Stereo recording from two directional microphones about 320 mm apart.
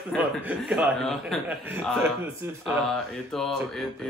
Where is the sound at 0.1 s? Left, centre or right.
Centre.